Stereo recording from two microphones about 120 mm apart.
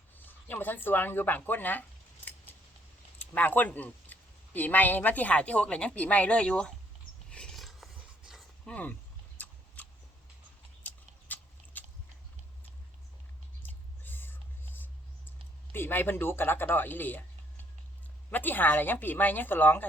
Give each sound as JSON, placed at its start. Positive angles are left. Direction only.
{"t": 0.2, "sound": "speech", "side_deg": 15}
{"t": 3.2, "sound": "speech", "side_deg": 15}
{"t": 7.3, "sound": "a sound", "side_deg": 5}
{"t": 8.6, "sound": "speech", "side_deg": 10}
{"t": 9.8, "sound": "a sound", "side_deg": 15}
{"t": 14.0, "sound": "whispering", "side_deg": 15}
{"t": 15.7, "sound": "speech", "side_deg": 20}
{"t": 18.3, "sound": "speech", "side_deg": 15}